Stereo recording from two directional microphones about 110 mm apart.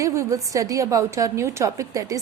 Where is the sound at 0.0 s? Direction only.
30° right (ahead or behind).